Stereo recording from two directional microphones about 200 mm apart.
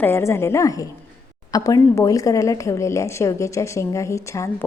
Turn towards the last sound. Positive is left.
turn(degrees=15)  # may be behind; listen again after turning